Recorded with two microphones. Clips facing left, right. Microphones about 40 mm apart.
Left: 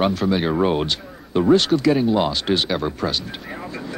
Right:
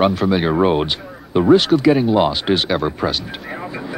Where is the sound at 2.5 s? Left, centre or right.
Centre.